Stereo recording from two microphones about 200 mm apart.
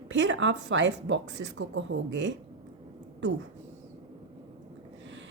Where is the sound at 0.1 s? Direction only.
65° right (ahead or behind).